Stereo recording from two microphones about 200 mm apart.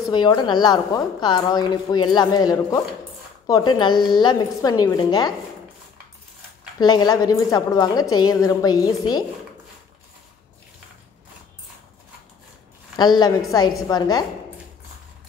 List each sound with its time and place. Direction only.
0.1 s a woman's voice: 20° left (ahead or behind)
6.8 s a woman's voice: 20° left (ahead or behind)
12.9 s a woman's voice: 20° left (ahead or behind)